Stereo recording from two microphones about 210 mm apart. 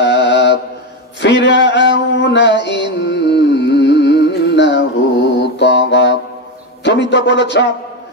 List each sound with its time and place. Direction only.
0.0 s mantra: 55° left (ahead or behind)
1.2 s music: 55° left (ahead or behind)
5.4 s mantra: 55° left (ahead or behind)
6.8 s a man's voice: 55° left (ahead or behind)